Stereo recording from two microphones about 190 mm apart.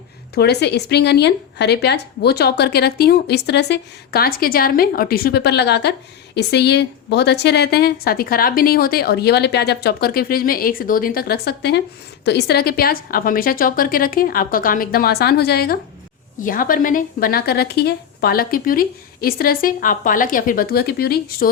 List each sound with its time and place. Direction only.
0.3 s a woman's voice: 60° left (ahead or behind)